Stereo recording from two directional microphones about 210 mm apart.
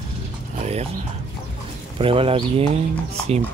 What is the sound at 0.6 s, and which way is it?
Music, 30° right (ahead or behind).